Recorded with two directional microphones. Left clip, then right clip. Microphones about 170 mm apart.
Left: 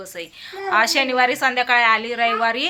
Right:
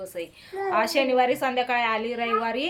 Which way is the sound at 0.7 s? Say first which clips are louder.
Left 5 dB; centre (ahead or behind).